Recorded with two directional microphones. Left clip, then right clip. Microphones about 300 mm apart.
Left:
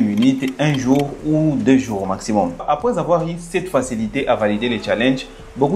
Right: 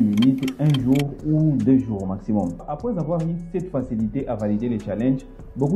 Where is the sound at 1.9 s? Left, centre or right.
Centre.